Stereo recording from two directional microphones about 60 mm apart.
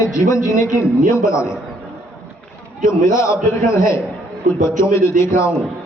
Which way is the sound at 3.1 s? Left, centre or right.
Left.